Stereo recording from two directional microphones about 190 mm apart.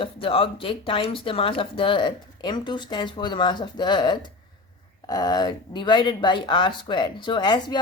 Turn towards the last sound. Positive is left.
turn(degrees=25)  # may be behind; listen again after turning